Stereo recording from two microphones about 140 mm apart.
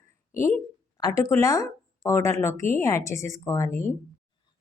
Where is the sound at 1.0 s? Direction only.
25° left (ahead or behind).